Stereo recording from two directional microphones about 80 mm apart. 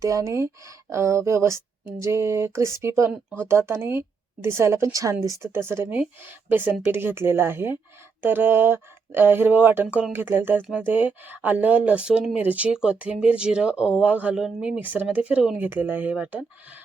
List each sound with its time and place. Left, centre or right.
0.0 s a woman's voice: right
5.5 s a woman's voice: right
9.8 s speech: centre
10.1 s speech: right; by 14.8 s centre
14.8 s speech: right